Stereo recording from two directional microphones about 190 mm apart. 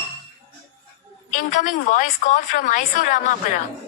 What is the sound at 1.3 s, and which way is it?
A woman's voice, 40° left (ahead or behind).